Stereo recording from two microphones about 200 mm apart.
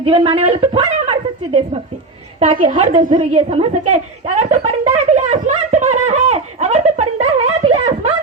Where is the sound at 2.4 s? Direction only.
25° right (ahead or behind).